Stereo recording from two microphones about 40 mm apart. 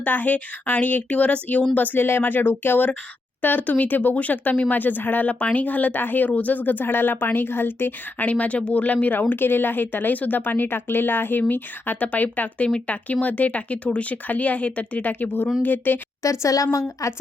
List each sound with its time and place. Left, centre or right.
0.0 s speech: left
5.3 s speech: left
8.2 s speech: left
9.3 s speech: left
12.0 s speech: left